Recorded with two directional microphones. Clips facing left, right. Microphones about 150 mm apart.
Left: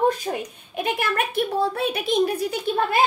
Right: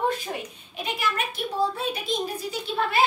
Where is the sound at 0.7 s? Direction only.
55° left (ahead or behind).